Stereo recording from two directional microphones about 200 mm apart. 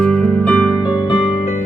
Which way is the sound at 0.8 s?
25° left (ahead or behind).